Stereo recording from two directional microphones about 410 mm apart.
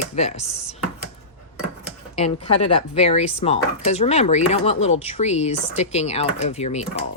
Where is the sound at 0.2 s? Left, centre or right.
Centre.